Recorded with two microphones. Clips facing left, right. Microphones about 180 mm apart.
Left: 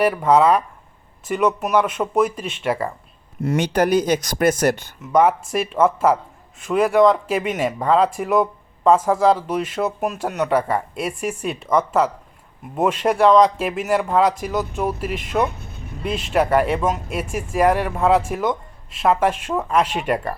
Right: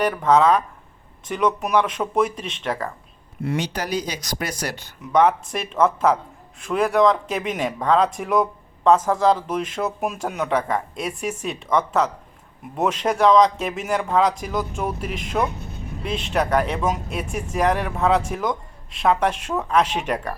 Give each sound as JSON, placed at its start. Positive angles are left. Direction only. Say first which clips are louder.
{"t": 0.0, "sound": "speech", "louder": "left 2 dB", "side_deg": 10}
{"t": 3.4, "sound": "speech", "louder": "left 7 dB", "side_deg": 50}
{"t": 5.1, "sound": "speech", "louder": "left 2 dB", "side_deg": 5}